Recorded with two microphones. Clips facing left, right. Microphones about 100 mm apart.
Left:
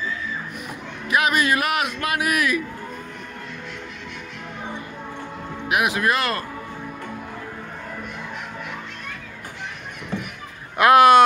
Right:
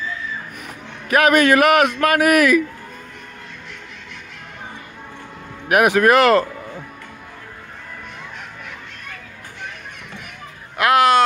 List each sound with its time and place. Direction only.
1.1 s a man's voice: 60° right (ahead or behind)
5.8 s speech: 65° right (ahead or behind)
10.8 s speech: 20° left (ahead or behind)